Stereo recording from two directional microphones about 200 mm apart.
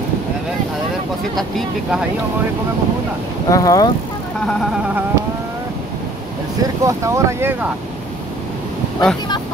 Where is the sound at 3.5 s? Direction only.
15° left (ahead or behind).